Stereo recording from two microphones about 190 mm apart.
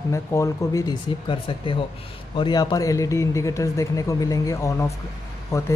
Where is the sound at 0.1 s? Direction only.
15° left (ahead or behind).